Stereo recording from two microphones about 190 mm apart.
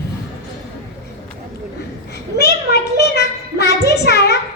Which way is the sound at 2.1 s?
60° left (ahead or behind).